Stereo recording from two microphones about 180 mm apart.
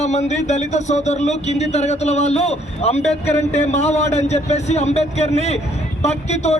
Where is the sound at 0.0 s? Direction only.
40° left (ahead or behind).